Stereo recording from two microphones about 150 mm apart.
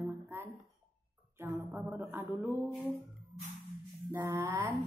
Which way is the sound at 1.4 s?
15° right (ahead or behind).